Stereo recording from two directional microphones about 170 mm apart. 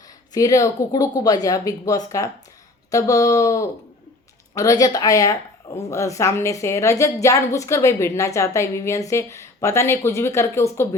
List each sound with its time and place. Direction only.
0.3 s a woman's voice: 20° left (ahead or behind)